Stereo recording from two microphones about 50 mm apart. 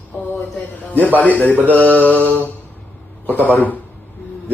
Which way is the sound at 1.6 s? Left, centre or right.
Left.